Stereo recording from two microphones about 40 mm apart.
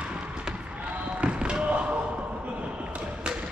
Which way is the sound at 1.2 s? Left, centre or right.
Right.